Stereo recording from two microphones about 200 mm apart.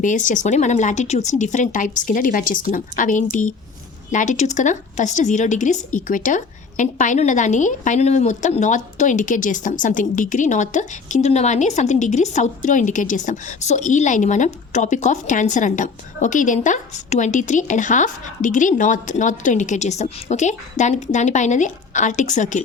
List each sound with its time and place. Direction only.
0.0 s speech: 40° left (ahead or behind)